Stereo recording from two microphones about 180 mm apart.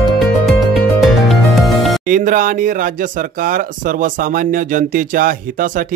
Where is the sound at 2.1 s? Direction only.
50° right (ahead or behind).